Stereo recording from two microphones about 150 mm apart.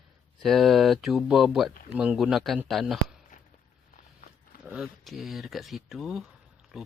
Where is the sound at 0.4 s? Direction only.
Centre (ahead or behind).